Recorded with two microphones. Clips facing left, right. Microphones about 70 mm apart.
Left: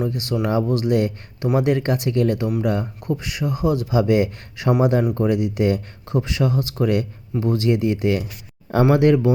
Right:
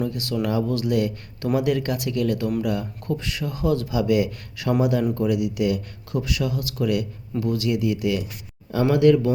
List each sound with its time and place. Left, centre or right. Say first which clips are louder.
0.0 s a man's voice: left 2 dB; left